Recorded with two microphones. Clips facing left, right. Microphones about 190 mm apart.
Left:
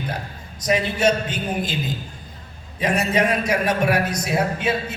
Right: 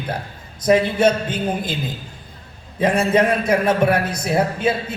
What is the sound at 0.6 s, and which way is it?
A man's voice, 55° right (ahead or behind).